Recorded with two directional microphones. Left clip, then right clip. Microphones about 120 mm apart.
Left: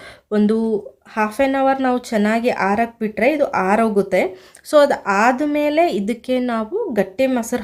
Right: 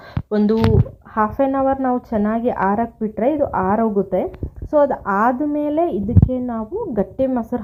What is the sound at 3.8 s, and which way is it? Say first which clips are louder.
Speech: left 2 dB; 35° left (ahead or behind).